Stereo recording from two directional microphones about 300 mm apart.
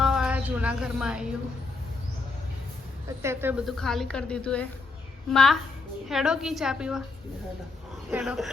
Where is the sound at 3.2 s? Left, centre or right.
Centre.